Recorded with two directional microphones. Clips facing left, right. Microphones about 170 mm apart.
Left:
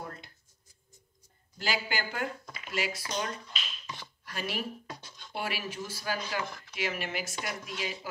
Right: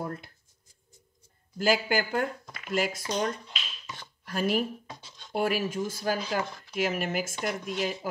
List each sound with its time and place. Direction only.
1.6 s speech: 50° right (ahead or behind)